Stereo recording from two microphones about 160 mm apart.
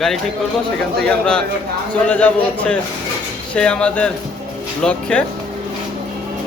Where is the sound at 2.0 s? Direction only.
10° left (ahead or behind).